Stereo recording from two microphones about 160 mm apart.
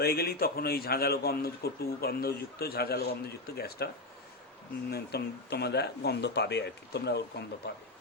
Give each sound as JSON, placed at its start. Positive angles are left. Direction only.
{"t": 0.0, "sound": "a man's voice", "side_deg": 75}
{"t": 4.9, "sound": "speech", "side_deg": 85}